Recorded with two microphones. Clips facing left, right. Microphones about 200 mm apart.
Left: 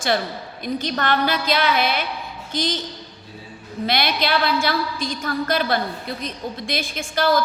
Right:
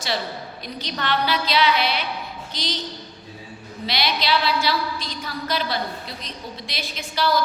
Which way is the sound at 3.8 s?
55° left (ahead or behind).